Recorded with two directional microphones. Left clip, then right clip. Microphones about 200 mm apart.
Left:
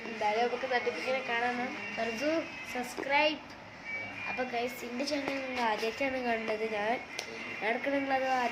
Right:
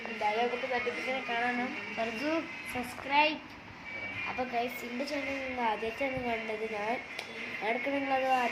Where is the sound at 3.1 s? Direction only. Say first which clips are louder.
Right 1 dB; 5° left (ahead or behind).